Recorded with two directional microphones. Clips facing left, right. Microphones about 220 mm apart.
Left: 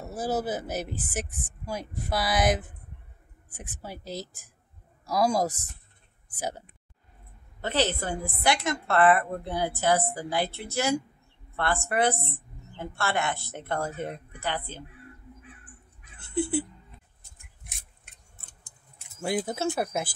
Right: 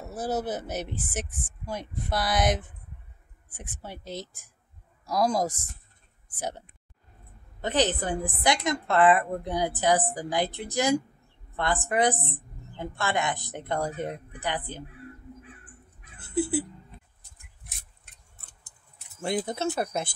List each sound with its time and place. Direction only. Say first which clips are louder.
0.0 s speech: left 1 dB; centre (ahead or behind)
7.6 s a woman's voice: right 2 dB; 15° right (ahead or behind)
16.2 s a sound: right 1 dB; 5° right (ahead or behind)
19.2 s speech: even; 5° left (ahead or behind)